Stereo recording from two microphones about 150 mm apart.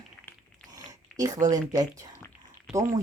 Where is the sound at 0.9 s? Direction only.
25° right (ahead or behind).